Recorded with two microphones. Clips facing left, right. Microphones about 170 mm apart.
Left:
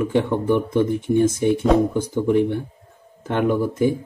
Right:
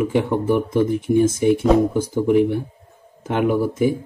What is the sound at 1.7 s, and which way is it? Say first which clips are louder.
Speech: right 1 dB; 5° right (ahead or behind).